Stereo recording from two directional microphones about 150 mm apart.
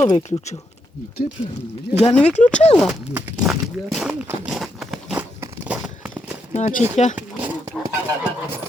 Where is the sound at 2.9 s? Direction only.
10° right (ahead or behind).